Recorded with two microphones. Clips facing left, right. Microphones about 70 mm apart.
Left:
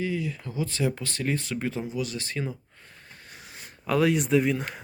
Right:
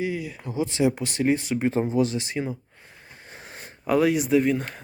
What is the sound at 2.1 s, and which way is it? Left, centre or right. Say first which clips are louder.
Speech: right 4 dB; centre.